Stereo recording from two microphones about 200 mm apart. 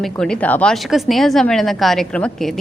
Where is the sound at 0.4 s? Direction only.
5° left (ahead or behind).